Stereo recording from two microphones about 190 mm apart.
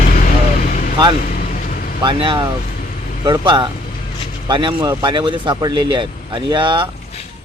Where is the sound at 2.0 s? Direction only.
25° right (ahead or behind).